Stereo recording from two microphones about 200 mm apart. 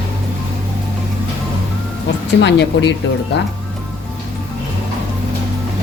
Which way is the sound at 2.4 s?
60° left (ahead or behind).